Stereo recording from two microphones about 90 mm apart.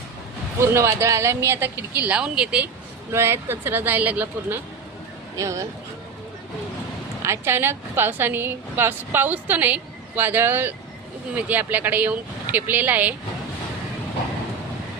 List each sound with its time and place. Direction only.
0.6 s a woman's voice: 30° right (ahead or behind); by 2.6 s 10° right (ahead or behind)
3.1 s a woman's voice: 30° right (ahead or behind)
5.4 s speech: 35° right (ahead or behind)
7.2 s a woman's voice: 30° right (ahead or behind)